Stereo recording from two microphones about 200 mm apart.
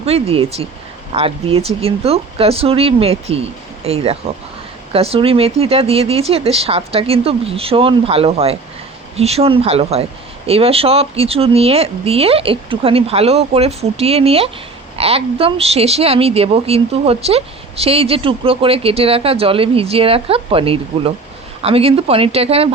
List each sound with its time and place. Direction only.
0.0 s speech: 30° right (ahead or behind)